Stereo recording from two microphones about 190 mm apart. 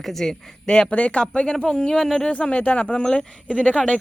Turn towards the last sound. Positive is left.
turn(degrees=5)  # may be behind; listen again after turning